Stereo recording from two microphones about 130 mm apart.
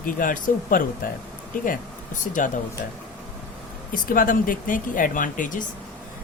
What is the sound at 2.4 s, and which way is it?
Speech, 85° left.